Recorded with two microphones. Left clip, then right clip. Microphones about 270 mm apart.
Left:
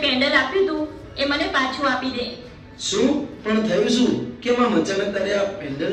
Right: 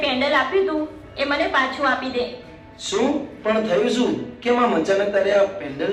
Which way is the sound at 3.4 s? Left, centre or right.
Centre.